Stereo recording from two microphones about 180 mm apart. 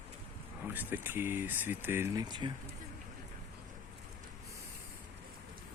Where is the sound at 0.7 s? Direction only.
10° right (ahead or behind).